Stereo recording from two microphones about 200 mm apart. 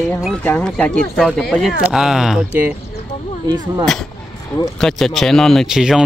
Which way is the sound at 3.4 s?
20° right (ahead or behind).